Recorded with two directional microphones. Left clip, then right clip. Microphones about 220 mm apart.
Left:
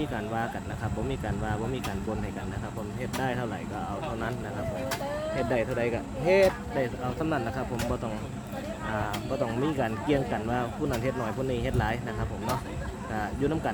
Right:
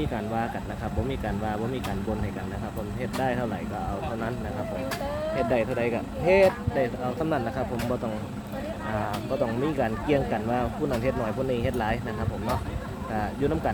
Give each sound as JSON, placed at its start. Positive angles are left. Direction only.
{"t": 5.3, "sound": "speech", "side_deg": 0}
{"t": 8.9, "sound": "speech", "side_deg": 5}
{"t": 13.1, "sound": "speech", "side_deg": 5}